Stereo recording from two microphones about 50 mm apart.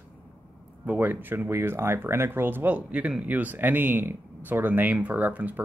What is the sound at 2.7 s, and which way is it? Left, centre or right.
Speech, right.